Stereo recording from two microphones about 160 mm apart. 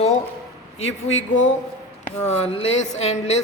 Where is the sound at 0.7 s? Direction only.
45° left (ahead or behind).